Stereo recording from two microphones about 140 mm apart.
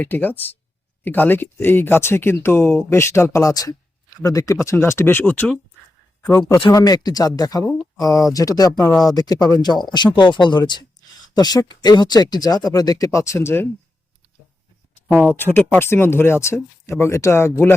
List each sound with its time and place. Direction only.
0.0 s speech: 15° left (ahead or behind)
6.6 s speech: 30° left (ahead or behind)
15.4 s speech: 15° left (ahead or behind)